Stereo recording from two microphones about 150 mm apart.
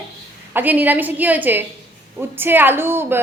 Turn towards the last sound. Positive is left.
turn(degrees=-15)  # may be behind; listen again after turning